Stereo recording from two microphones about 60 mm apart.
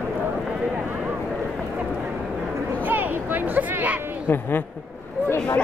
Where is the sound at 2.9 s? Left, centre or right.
Right.